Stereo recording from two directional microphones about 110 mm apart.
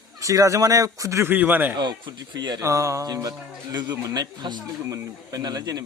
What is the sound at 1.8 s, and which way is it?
Speech, 45° right (ahead or behind).